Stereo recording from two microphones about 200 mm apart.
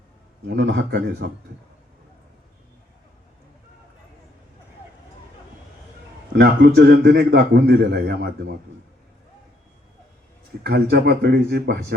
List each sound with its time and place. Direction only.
0.4 s a man's voice: 60° right (ahead or behind)
6.3 s a man's voice: 55° right (ahead or behind)
10.6 s speech: 55° right (ahead or behind)